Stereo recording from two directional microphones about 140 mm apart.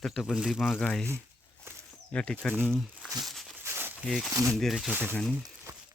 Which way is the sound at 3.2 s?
Centre (ahead or behind).